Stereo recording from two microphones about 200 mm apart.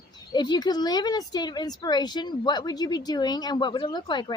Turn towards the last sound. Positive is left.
turn(degrees=20)  # may be behind; listen again after turning